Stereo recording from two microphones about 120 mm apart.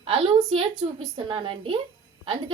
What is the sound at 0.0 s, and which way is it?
A woman's voice, 50° right (ahead or behind).